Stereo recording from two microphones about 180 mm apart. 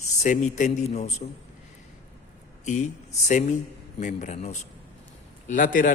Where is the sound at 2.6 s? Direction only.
40° left (ahead or behind).